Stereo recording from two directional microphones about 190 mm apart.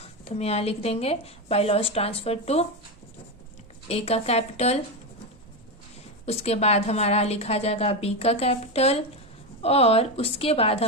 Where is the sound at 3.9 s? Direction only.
30° left (ahead or behind).